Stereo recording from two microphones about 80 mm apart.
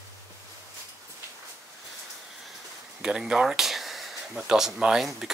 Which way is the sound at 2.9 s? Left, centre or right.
Centre.